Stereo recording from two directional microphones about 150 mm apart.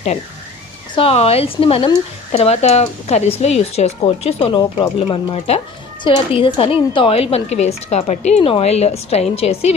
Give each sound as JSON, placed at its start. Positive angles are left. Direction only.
{"t": 0.9, "sound": "a woman's voice", "side_deg": 40}
{"t": 5.0, "sound": "a woman's voice", "side_deg": 45}